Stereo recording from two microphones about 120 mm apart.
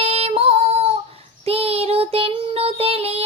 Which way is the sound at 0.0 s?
55° right (ahead or behind).